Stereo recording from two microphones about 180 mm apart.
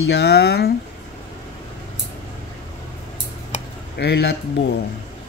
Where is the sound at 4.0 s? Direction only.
60° left (ahead or behind).